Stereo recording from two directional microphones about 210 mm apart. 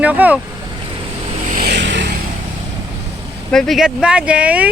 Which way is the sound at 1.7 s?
55° right (ahead or behind).